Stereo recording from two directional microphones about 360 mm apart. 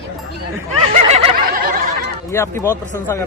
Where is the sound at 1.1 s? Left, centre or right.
Centre.